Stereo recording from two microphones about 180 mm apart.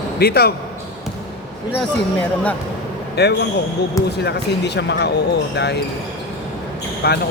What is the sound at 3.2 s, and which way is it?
Speech, 70° left (ahead or behind).